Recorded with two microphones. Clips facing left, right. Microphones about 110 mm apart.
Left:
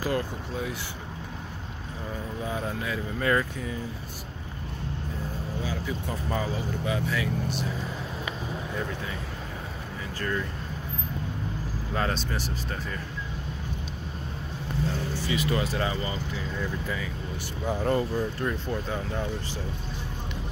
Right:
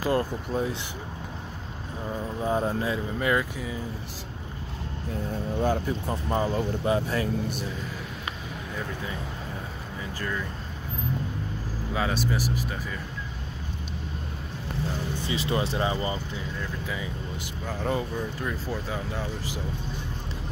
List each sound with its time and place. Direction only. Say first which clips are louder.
0.1 s speech: right 4 dB; 35° right (ahead or behind)
2.4 s speech: right 6 dB; 35° right (ahead or behind)
3.2 s speech: left 2 dB; 15° right (ahead or behind)
5.6 s speech: right 8 dB; 55° right (ahead or behind)
6.0 s speech: right 3 dB; 35° right (ahead or behind)
11.9 s speech: right 2 dB; 5° right (ahead or behind)
15.1 s speech: even; 25° right (ahead or behind)
17.8 s speech: left 2 dB; centre (ahead or behind)